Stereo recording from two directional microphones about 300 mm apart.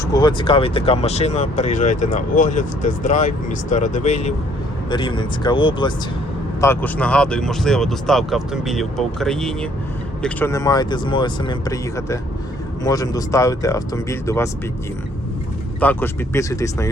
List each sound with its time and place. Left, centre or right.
0.0 s speech: centre
15.8 s speech: centre